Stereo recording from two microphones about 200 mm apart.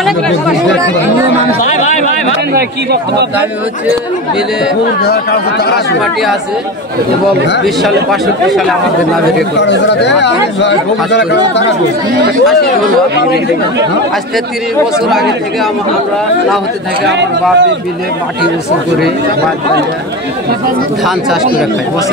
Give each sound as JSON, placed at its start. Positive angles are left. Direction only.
{"t": 2.5, "sound": "speech", "side_deg": -55}
{"t": 5.0, "sound": "speech", "side_deg": 55}
{"t": 7.6, "sound": "speech", "side_deg": 0}
{"t": 9.6, "sound": "speech", "side_deg": 60}
{"t": 15.0, "sound": "speech", "side_deg": 0}
{"t": 17.0, "sound": "speech", "side_deg": -60}